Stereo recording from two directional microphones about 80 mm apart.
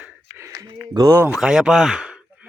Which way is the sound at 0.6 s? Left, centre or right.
Right.